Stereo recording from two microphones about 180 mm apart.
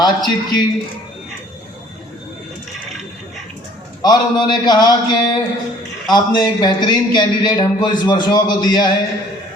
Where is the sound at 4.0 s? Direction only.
25° left (ahead or behind).